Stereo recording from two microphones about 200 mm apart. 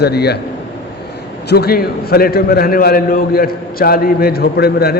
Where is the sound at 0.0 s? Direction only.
55° left (ahead or behind).